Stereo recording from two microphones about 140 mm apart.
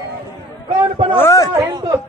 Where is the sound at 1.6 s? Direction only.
25° right (ahead or behind).